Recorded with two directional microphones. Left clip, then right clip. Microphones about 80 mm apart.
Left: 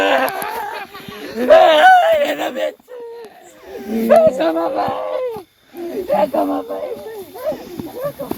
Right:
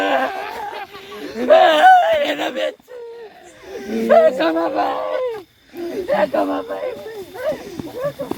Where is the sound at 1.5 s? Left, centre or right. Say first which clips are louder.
Left 2 dB; left.